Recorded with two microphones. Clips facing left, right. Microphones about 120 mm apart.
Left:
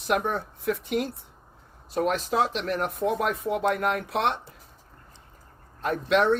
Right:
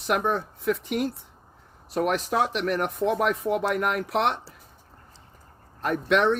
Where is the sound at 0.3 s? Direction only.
50° right (ahead or behind).